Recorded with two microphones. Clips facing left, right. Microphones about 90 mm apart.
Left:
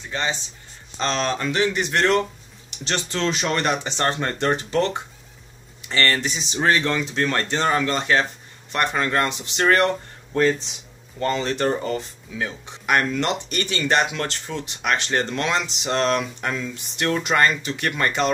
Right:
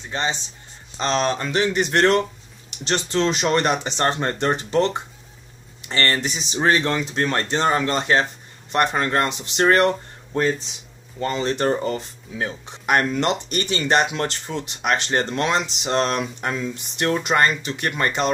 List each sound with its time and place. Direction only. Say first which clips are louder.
0.1 s speech: right 1 dB; 25° right (ahead or behind)
1.8 s speech: right 4 dB; 40° right (ahead or behind)
2.9 s speech: right 3 dB; 25° right (ahead or behind)
5.9 s speech: even; 30° right (ahead or behind)
11.1 s speech: left 1 dB; 10° right (ahead or behind)
11.4 s speech: right 2 dB; 30° right (ahead or behind)